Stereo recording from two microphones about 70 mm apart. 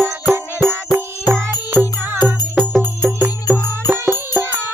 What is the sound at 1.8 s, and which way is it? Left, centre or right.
Music, right.